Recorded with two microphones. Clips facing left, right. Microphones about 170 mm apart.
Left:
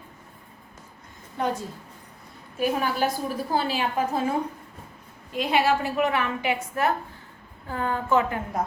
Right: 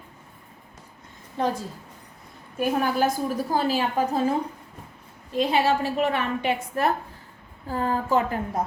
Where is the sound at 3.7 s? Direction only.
35° right (ahead or behind).